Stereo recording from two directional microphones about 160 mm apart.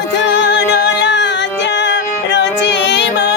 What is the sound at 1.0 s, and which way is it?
Music, 90° left.